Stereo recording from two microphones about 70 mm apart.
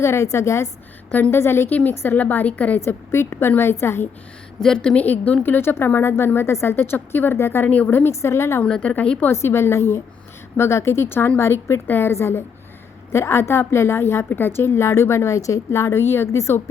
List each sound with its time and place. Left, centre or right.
0.0 s a woman's voice: left
1.1 s a woman's voice: left
2.8 s a woman's voice: left
4.6 s a woman's voice: centre
5.4 s a woman's voice: left
7.7 s a woman's voice: left
7.9 s a woman's voice: left
8.8 s a woman's voice: centre
9.3 s a woman's voice: left